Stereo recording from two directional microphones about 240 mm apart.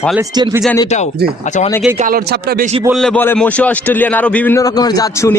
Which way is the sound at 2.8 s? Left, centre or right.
Centre.